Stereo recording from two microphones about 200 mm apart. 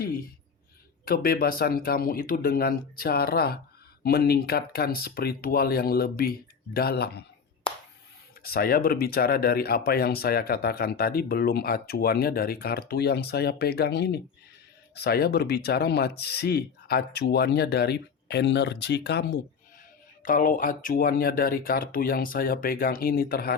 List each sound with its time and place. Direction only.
0.0 s a sound: 50° left (ahead or behind)
1.0 s speech: 50° left (ahead or behind)
8.4 s speech: 50° left (ahead or behind)
20.2 s speech: 45° left (ahead or behind)